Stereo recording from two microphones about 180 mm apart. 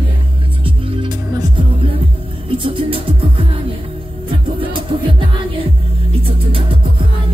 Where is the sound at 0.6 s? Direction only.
30° right (ahead or behind).